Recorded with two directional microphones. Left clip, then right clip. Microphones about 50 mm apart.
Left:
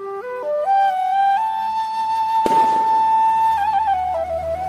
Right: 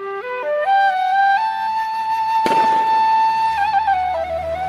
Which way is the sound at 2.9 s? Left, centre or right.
Right.